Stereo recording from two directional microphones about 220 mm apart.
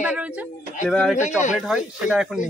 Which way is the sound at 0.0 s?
5° right (ahead or behind).